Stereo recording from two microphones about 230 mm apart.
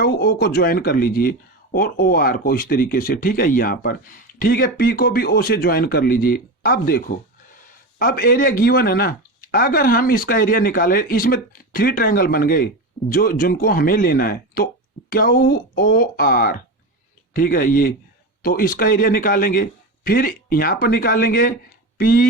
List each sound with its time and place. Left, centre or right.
0.0 s speech: left